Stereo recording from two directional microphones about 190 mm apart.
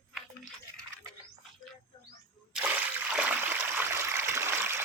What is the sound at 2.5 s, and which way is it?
Water, 5° right (ahead or behind).